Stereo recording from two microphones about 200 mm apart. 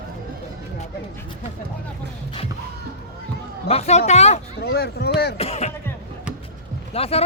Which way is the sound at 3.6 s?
30° left (ahead or behind).